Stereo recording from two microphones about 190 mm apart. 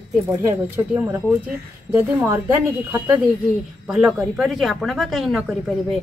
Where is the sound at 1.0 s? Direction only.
10° right (ahead or behind).